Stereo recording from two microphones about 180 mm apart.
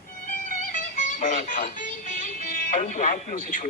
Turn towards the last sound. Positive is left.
turn(degrees=45)  # may be behind; listen again after turning